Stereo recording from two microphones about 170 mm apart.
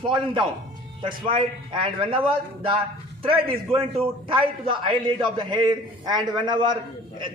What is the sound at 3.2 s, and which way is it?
A man's voice, 35° right (ahead or behind).